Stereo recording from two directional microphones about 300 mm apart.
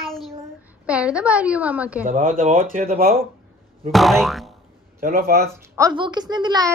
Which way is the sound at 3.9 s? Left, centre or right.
Centre.